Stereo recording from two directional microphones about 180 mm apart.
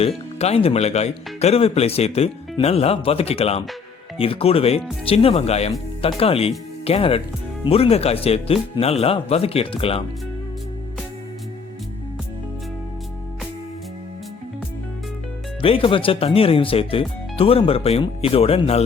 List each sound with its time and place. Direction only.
0.3 s speech: 35° left (ahead or behind)
15.6 s speech: 30° left (ahead or behind)